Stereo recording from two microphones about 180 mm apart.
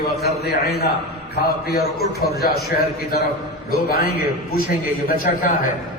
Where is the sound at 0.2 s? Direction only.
60° left (ahead or behind).